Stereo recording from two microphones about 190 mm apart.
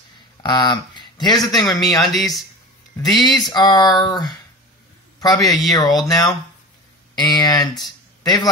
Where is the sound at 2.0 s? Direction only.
Centre (ahead or behind).